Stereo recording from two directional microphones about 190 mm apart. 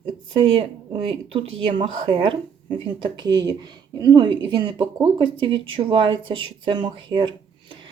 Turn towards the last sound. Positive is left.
turn(degrees=-25)  # may be behind; listen again after turning